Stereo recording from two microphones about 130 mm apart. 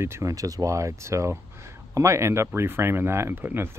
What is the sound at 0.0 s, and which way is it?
Speech, 20° right (ahead or behind).